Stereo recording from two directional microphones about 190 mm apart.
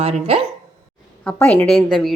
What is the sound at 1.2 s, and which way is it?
Speech, 10° left (ahead or behind).